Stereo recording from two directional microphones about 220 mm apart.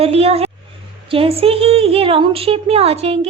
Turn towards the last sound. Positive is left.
turn(degrees=-30)  # may be behind; listen again after turning